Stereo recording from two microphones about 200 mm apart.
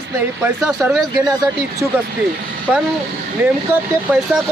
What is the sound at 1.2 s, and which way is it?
Speech, 15° right (ahead or behind).